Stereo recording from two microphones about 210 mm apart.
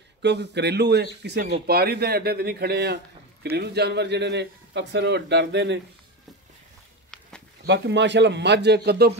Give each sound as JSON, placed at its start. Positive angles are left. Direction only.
{"t": 0.2, "sound": "a man's voice", "side_deg": -55}
{"t": 7.6, "sound": "a man's voice", "side_deg": -55}